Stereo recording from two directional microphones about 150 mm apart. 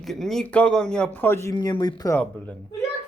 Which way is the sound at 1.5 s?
30° left (ahead or behind).